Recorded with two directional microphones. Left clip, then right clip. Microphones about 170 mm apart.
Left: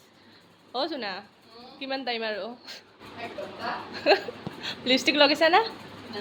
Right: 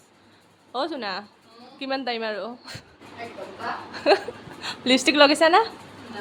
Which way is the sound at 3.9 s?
20° right (ahead or behind).